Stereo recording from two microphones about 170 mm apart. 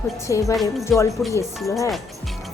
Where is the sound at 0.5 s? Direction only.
Centre (ahead or behind).